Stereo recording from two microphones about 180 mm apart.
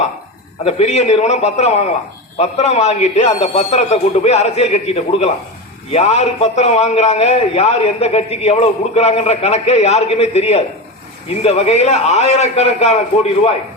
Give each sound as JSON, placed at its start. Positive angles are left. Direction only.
{"t": 0.6, "sound": "a man's voice", "side_deg": 35}